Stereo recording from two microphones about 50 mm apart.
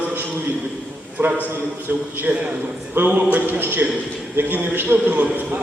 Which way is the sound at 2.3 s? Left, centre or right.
Right.